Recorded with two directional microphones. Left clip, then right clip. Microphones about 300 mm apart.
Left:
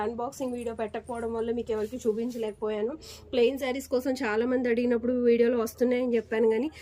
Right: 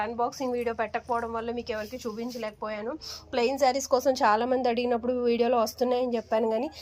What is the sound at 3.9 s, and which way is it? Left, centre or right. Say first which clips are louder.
A woman's voice: right 2 dB; centre.